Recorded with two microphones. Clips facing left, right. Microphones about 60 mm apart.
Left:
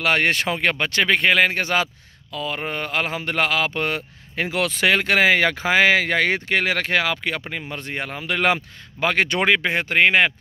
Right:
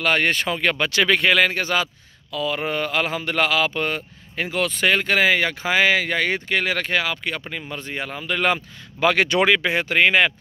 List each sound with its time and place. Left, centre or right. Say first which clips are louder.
0.0 s speech: even; left
0.5 s speech: even; left
1.6 s speech: left 1 dB; left
6.8 s speech: left 2 dB; left
7.7 s speech: right 1 dB; left
9.0 s speech: right 2 dB; left